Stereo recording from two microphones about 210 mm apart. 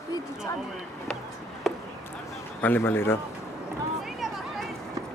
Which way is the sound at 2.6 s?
10° left (ahead or behind).